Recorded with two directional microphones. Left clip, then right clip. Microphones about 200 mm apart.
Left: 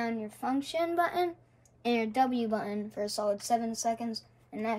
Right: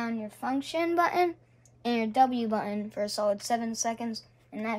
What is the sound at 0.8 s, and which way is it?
Speech, 30° right (ahead or behind).